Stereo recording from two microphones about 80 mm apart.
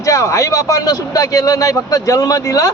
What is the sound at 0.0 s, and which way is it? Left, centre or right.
A man's voice, left.